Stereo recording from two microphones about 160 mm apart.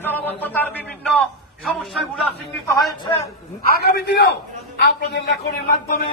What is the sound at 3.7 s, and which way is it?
A man's voice, 90° left.